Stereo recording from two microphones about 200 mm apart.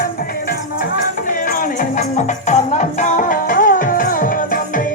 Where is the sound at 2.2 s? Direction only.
35° left (ahead or behind).